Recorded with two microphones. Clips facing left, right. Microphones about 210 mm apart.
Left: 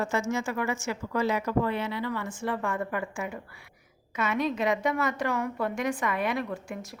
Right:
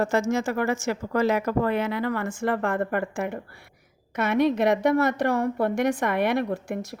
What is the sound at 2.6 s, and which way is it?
Speech, 65° right (ahead or behind).